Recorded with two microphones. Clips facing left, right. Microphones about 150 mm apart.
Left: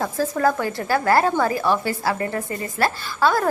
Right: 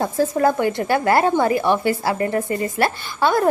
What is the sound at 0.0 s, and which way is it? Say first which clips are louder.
A woman's voice: right 3 dB; 25° right (ahead or behind).